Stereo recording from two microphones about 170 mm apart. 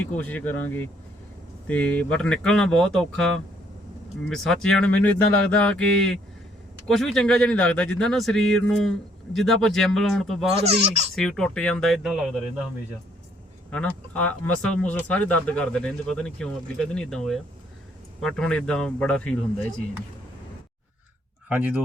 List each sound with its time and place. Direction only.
0.0 s speech: 10° left (ahead or behind)
10.6 s speech: 40° right (ahead or behind)
11.1 s speech: 5° left (ahead or behind)
13.7 s speech: 10° left (ahead or behind)
21.5 s speech: 10° right (ahead or behind)